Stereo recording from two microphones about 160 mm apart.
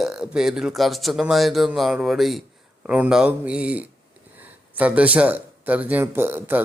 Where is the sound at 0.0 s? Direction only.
5° right (ahead or behind).